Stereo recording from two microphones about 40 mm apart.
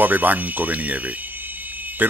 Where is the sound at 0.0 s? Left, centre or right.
Right.